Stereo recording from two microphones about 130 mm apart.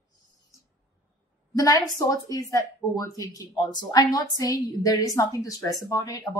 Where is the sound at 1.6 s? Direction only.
30° left (ahead or behind).